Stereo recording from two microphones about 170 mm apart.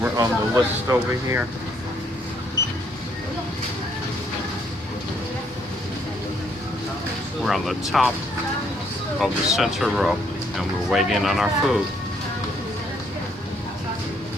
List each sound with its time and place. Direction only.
0.0 s speech: 15° right (ahead or behind)
7.4 s speech: centre (ahead or behind)
9.2 s speech: centre (ahead or behind)